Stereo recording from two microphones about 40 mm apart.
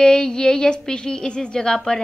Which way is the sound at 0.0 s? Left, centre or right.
Centre.